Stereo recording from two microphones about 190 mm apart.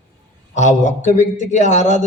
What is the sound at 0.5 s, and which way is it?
A man's voice, 40° left (ahead or behind).